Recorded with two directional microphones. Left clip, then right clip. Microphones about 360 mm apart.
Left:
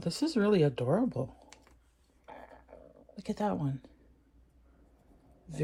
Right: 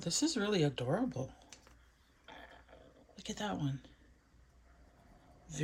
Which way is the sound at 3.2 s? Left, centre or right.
Centre.